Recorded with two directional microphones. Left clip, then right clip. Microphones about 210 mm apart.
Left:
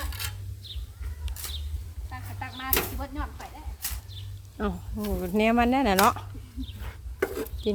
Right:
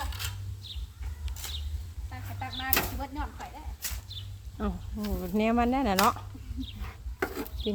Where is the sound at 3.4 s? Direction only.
Centre (ahead or behind).